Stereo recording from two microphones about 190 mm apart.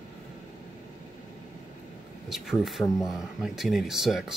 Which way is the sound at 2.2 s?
Centre (ahead or behind).